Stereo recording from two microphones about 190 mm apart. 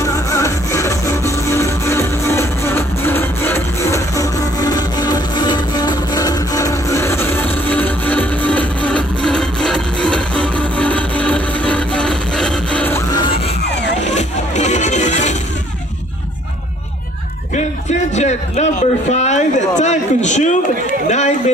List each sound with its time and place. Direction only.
0.0 s music: 15° left (ahead or behind)
14.0 s music: 40° left (ahead or behind)
17.5 s a sound: 40° left (ahead or behind)